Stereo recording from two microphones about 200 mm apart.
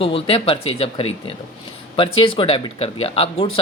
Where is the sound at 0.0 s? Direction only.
30° left (ahead or behind).